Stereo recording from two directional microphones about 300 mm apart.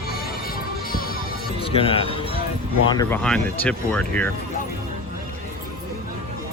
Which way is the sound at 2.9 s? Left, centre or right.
Centre.